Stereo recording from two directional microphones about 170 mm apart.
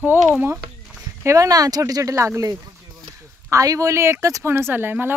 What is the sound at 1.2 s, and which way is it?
Speech, 20° right (ahead or behind).